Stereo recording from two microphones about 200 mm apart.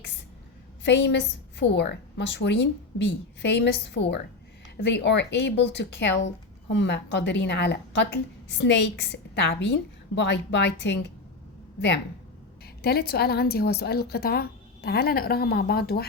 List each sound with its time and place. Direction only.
0.9 s speech: 60° left (ahead or behind)
12.6 s a woman's voice: 50° left (ahead or behind)